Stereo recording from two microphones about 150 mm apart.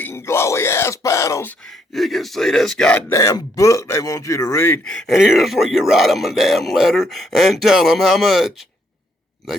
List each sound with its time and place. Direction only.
0.0 s groan: 15° left (ahead or behind)
1.6 s speech: centre (ahead or behind)
3.1 s a man's voice: 20° left (ahead or behind)
4.9 s speech: centre (ahead or behind)